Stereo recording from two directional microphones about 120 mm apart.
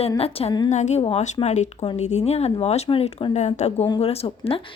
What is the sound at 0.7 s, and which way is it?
A woman's voice, 75° left (ahead or behind).